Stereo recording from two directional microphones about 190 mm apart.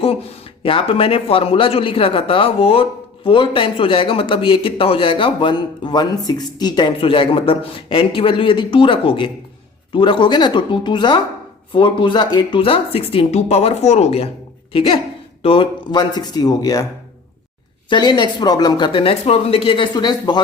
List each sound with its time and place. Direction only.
0.6 s speech: 30° left (ahead or behind)
17.8 s speech: 25° left (ahead or behind)